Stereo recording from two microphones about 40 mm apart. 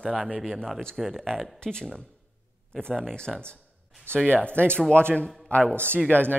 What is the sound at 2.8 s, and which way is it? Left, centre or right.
Speech, left.